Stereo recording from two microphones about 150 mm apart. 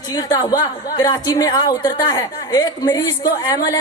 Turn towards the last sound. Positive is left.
turn(degrees=25)  # may be behind; listen again after turning